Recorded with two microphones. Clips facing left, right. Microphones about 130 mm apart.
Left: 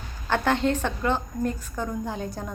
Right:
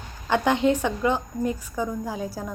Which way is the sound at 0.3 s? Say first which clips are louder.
Right 2 dB; 15° right (ahead or behind).